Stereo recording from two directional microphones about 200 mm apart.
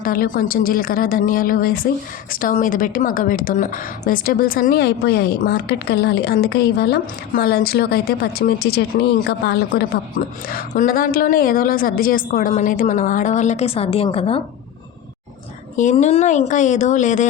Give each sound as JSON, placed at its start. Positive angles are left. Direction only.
{"t": 0.0, "sound": "a woman's voice", "side_deg": 45}
{"t": 15.7, "sound": "a woman's voice", "side_deg": 40}